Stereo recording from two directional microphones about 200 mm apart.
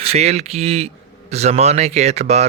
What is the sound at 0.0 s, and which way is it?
Speech, 30° right (ahead or behind).